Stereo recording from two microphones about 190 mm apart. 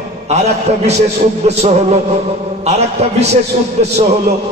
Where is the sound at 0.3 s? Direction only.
35° right (ahead or behind).